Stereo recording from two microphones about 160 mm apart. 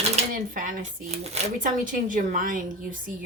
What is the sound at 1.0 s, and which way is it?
Speech, 40° right (ahead or behind).